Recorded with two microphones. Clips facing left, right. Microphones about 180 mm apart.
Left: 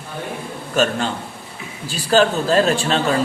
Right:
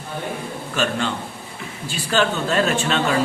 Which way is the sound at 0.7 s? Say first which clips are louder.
Left 4 dB; 45° left (ahead or behind).